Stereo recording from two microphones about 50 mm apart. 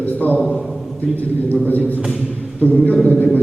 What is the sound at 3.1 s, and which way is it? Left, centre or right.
Speech, left.